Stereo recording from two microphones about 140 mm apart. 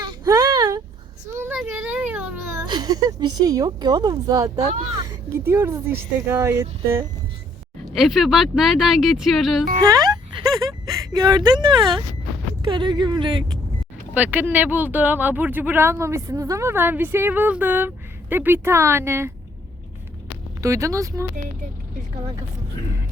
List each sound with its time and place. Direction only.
0.0 s whimper: 30° right (ahead or behind)
1.3 s whimper: 15° right (ahead or behind)
2.6 s speech: 30° right (ahead or behind)
5.0 s speech: 15° right (ahead or behind)
7.9 s speech: centre (ahead or behind)
9.8 s speech: 25° right (ahead or behind)
14.1 s speech: 10° right (ahead or behind)
20.6 s speech: 20° right (ahead or behind)